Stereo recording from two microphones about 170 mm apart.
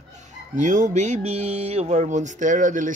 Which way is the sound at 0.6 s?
45° right (ahead or behind).